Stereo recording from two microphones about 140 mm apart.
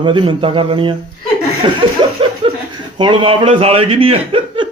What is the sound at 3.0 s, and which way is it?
A man's voice, 40° right (ahead or behind).